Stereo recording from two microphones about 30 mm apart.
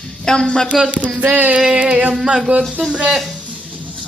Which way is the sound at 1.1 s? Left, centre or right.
Right.